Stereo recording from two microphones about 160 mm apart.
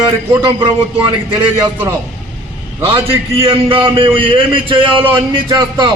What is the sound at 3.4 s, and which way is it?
A man's voice, 35° right (ahead or behind).